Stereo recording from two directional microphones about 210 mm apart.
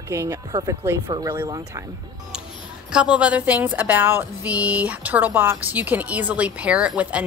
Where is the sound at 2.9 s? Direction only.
5° right (ahead or behind).